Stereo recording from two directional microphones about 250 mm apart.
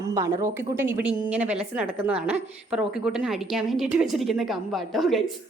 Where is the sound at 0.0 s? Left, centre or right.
Centre.